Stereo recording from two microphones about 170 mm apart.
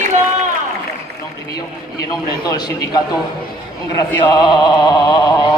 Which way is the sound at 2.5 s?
25° left (ahead or behind).